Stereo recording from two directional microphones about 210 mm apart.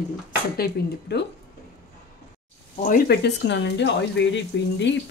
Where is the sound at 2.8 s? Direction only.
45° left (ahead or behind).